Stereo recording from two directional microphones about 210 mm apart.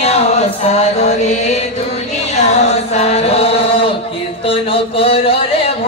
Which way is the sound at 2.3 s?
30° left (ahead or behind).